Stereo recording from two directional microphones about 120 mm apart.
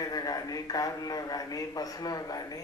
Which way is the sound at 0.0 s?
30° left (ahead or behind).